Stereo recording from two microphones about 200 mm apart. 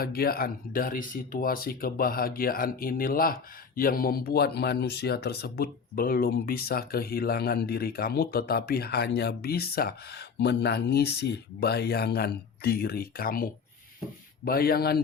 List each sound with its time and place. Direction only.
0.0 s speech: 50° left (ahead or behind)